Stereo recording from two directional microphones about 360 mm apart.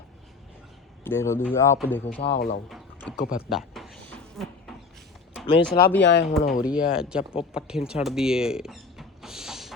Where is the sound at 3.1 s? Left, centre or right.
Left.